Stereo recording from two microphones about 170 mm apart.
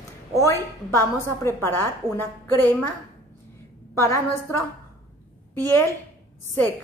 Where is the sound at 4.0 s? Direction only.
15° left (ahead or behind).